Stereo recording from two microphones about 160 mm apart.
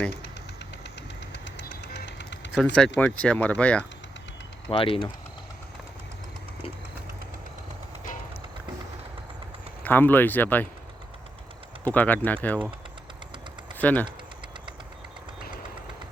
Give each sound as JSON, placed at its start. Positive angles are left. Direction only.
{"t": 1.3, "sound": "a sound", "side_deg": 90}
{"t": 2.7, "sound": "speech", "side_deg": 5}
{"t": 4.7, "sound": "speech", "side_deg": 35}
{"t": 9.8, "sound": "speech", "side_deg": 10}
{"t": 11.9, "sound": "speech", "side_deg": 10}
{"t": 13.7, "sound": "speech", "side_deg": 10}